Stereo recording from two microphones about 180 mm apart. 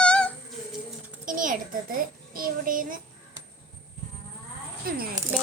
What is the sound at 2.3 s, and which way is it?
Speech, 50° right (ahead or behind).